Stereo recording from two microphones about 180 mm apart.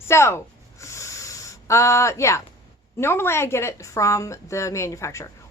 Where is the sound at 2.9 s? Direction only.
15° left (ahead or behind).